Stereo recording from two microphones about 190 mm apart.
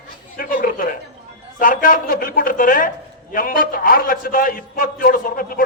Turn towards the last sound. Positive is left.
turn(degrees=50)  # may be behind; listen again after turning